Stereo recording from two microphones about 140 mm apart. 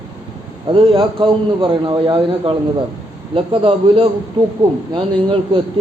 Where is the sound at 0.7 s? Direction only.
40° right (ahead or behind).